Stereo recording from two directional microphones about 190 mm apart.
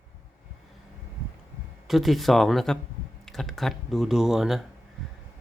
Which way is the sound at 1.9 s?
Centre (ahead or behind).